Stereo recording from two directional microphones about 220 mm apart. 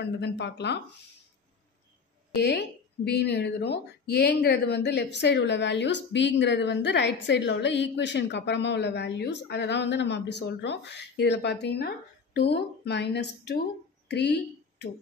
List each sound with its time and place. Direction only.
0.0 s speech: 50° left (ahead or behind)
3.1 s speech: 50° left (ahead or behind)
14.0 s a sound: 50° left (ahead or behind)